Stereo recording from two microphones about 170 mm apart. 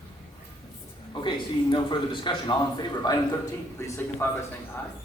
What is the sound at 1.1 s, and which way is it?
A man's voice, 25° left (ahead or behind).